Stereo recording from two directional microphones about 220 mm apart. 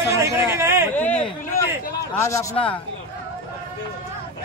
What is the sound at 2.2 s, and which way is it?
Speech, 15° left (ahead or behind).